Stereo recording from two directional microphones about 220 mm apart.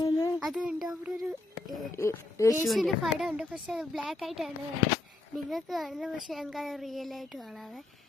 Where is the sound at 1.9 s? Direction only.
15° left (ahead or behind).